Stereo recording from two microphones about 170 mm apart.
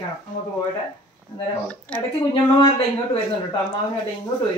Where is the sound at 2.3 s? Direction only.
35° left (ahead or behind).